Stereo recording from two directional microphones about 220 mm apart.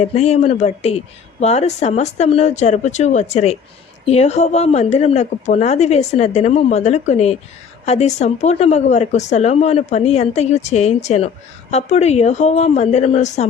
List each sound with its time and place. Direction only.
0.0 s a woman's voice: 30° left (ahead or behind)